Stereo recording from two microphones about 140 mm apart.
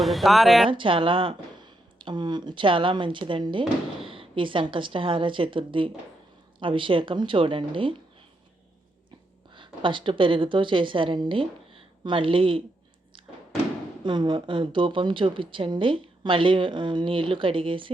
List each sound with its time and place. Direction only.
0.0 s speech: centre (ahead or behind)
0.7 s speech: 35° right (ahead or behind)
9.5 s a woman's voice: 35° right (ahead or behind)
14.0 s speech: 35° right (ahead or behind)